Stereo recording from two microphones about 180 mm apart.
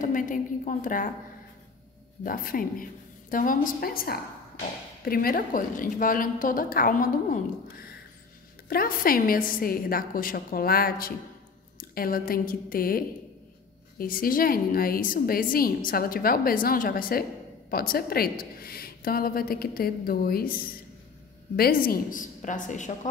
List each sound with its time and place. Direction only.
0.0 s a woman's voice: 45° left (ahead or behind)
2.2 s a woman's voice: 50° left (ahead or behind)